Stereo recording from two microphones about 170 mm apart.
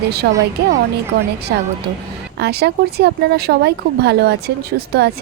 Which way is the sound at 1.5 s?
75° right (ahead or behind).